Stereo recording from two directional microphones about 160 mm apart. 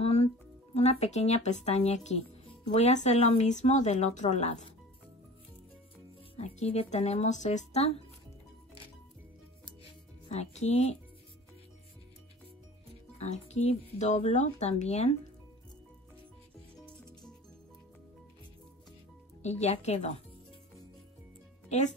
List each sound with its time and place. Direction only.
0.0 s music: 40° left (ahead or behind)
0.7 s speech: 40° left (ahead or behind)
6.3 s speech: 40° left (ahead or behind)
10.3 s speech: 45° left (ahead or behind)
13.2 s speech: 45° left (ahead or behind)
16.8 s music: 5° left (ahead or behind)
19.4 s speech: 45° left (ahead or behind)
21.6 s speech: 45° left (ahead or behind)